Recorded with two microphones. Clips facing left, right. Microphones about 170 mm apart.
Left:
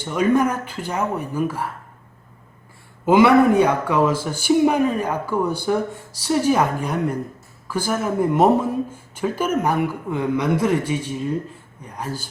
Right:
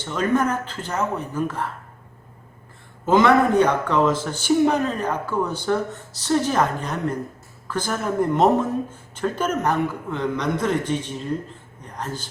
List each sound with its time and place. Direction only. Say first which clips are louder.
0.0 s speech: left 3 dB; 10° left (ahead or behind)
3.1 s a man's voice: left 3 dB; 10° left (ahead or behind)